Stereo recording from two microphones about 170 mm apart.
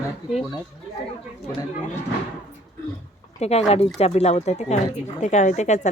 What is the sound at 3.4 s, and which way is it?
Speech, 40° left (ahead or behind).